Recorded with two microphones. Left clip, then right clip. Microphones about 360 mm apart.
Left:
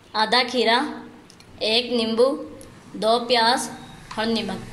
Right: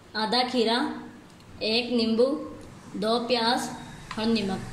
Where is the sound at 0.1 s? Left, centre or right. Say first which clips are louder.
Left 5 dB; centre.